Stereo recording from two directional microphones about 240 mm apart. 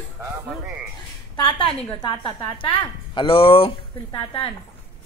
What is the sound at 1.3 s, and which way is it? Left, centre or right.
A woman's voice, left.